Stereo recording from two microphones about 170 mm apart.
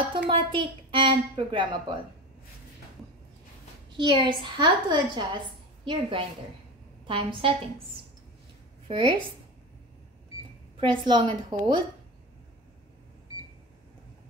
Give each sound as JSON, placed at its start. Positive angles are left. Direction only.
{"t": 0.1, "sound": "a woman's voice", "side_deg": -30}
{"t": 3.9, "sound": "a woman's voice", "side_deg": -25}
{"t": 8.8, "sound": "a woman's voice", "side_deg": -30}
{"t": 10.8, "sound": "a woman's voice", "side_deg": -25}